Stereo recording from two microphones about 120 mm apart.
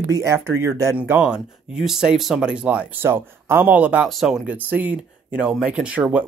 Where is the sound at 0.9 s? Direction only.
15° right (ahead or behind).